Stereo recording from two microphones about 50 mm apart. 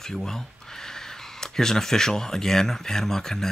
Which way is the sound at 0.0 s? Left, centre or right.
Centre.